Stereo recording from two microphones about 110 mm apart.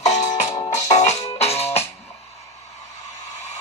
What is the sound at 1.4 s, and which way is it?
Music, 70° left (ahead or behind).